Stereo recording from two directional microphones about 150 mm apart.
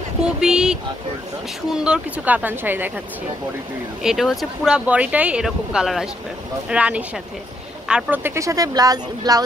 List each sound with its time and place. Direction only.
0.2 s speech: 5° right (ahead or behind)
4.0 s speech: centre (ahead or behind); by 9.4 s 25° right (ahead or behind)